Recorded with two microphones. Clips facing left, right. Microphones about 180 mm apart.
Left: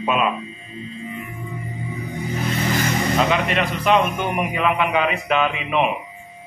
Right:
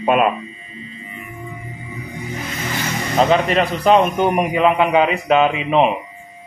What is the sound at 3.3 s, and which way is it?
A man's voice, 35° right (ahead or behind).